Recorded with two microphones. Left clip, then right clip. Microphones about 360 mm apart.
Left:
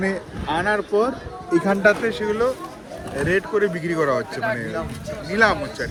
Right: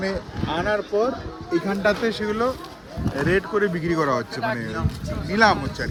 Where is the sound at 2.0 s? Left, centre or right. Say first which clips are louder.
Left 2 dB; right.